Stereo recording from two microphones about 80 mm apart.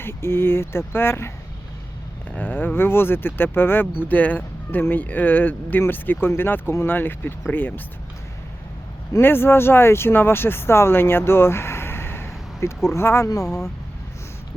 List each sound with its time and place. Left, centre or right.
0.0 s speech: left
2.3 s speech: left
9.1 s speech: left